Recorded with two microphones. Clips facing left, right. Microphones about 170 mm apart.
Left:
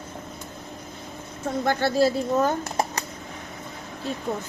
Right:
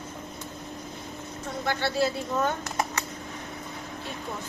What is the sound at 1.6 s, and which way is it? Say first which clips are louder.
Speech: left 5 dB; 40° left (ahead or behind).